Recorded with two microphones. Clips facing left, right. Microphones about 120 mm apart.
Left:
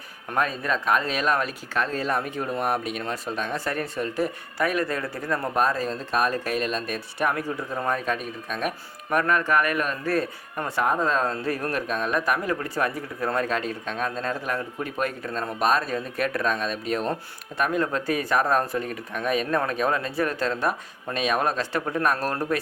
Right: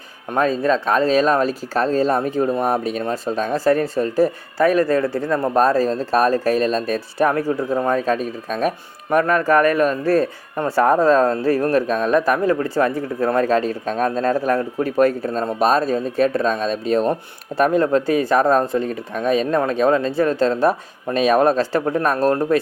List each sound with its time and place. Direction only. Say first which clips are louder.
0.3 s speech: right 8 dB; 30° right (ahead or behind)